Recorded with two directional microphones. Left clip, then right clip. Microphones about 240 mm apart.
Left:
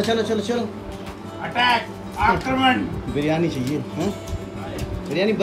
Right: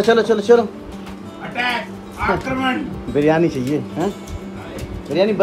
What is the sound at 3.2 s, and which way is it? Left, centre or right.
Speech, right.